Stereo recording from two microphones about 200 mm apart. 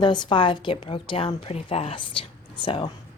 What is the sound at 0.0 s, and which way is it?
A woman's voice, 25° left (ahead or behind).